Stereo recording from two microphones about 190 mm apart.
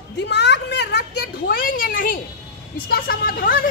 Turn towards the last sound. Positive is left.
turn(degrees=50)  # may be behind; listen again after turning